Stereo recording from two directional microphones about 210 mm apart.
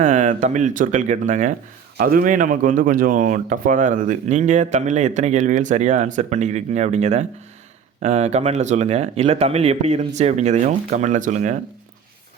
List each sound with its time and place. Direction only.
0.0 s speech: 35° right (ahead or behind)